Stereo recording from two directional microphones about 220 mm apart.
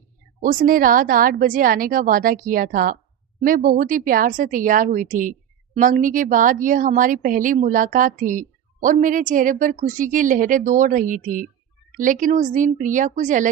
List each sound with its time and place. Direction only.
0.4 s speech: 40° right (ahead or behind)